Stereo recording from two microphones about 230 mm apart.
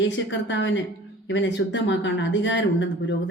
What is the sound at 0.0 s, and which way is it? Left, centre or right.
Speech, left.